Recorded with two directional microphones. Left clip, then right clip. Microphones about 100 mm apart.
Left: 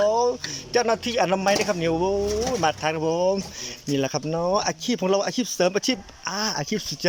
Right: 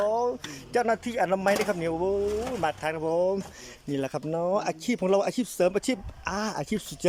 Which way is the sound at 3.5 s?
15° right (ahead or behind).